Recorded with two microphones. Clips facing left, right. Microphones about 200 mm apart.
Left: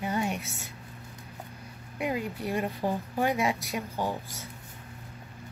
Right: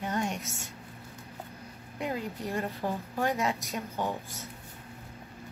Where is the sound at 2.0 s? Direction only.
10° left (ahead or behind).